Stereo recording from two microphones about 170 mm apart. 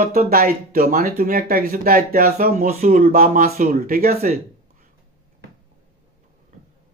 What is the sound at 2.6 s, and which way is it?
Speech, 40° right (ahead or behind).